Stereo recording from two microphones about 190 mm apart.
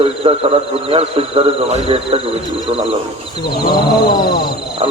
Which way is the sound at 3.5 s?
55° left (ahead or behind).